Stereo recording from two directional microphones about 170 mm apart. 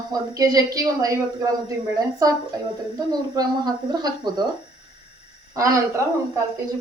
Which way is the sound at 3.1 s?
25° right (ahead or behind).